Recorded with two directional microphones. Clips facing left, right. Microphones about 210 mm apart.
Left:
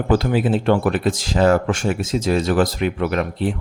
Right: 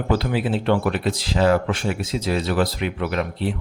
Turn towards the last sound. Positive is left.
turn(degrees=45)  # may be behind; listen again after turning